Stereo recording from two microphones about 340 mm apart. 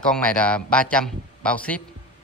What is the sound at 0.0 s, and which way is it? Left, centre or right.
A man's voice, centre.